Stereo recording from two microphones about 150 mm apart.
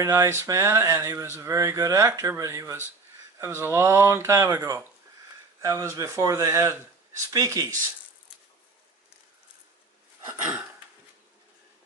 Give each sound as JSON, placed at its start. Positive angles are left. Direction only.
{"t": 0.0, "sound": "speech", "side_deg": -20}
{"t": 10.2, "sound": "speech", "side_deg": -10}